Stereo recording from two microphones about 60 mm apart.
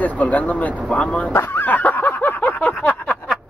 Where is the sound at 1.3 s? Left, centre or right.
Left.